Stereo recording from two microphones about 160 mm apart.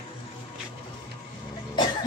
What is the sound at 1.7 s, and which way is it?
Cough, 25° left (ahead or behind).